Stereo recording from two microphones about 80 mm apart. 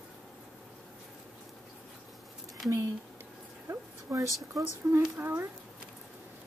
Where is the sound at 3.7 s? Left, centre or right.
Right.